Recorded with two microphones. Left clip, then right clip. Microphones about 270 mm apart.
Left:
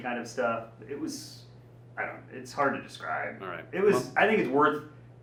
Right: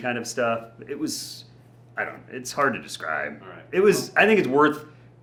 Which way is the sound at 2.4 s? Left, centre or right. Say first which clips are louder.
Right 5 dB; right.